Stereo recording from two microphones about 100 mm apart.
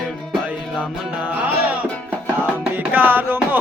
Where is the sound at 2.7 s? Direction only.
15° right (ahead or behind).